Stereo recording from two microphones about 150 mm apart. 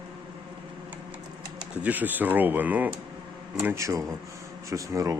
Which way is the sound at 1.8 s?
10° right (ahead or behind).